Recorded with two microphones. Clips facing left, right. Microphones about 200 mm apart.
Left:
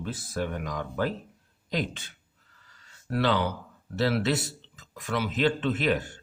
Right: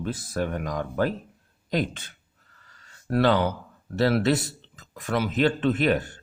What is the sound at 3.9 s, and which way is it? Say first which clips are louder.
Speech: right 4 dB; 50° right (ahead or behind).